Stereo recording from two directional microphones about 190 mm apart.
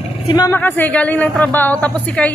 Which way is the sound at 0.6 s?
10° left (ahead or behind).